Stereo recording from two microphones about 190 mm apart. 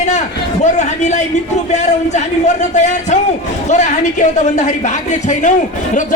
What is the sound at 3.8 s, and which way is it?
Speech, 40° left (ahead or behind).